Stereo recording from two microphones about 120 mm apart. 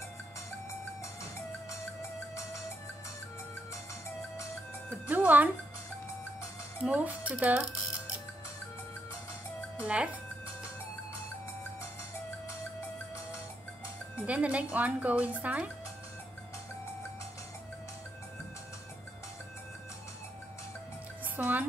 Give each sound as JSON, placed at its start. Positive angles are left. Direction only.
{"t": 1.7, "sound": "music", "side_deg": 25}
{"t": 5.0, "sound": "speech", "side_deg": -15}
{"t": 6.8, "sound": "speech", "side_deg": -10}
{"t": 9.8, "sound": "speech", "side_deg": -10}
{"t": 14.2, "sound": "speech", "side_deg": -10}
{"t": 21.4, "sound": "a woman's voice", "side_deg": -15}